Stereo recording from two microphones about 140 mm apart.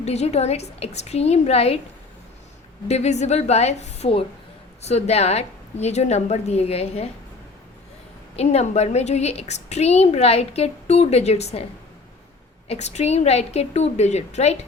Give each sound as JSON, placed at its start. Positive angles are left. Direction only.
{"t": 0.0, "sound": "a woman's voice", "side_deg": 50}
{"t": 2.8, "sound": "a woman's voice", "side_deg": 50}
{"t": 8.4, "sound": "a woman's voice", "side_deg": 50}
{"t": 12.6, "sound": "a woman's voice", "side_deg": 50}